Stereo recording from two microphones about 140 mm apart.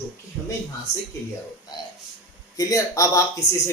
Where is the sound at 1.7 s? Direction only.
30° left (ahead or behind).